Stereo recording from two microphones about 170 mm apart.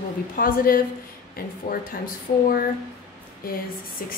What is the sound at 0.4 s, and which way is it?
A woman's voice, 55° left (ahead or behind).